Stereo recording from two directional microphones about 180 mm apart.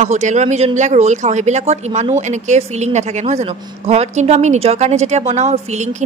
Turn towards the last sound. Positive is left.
turn(degrees=-40)  # may be behind; listen again after turning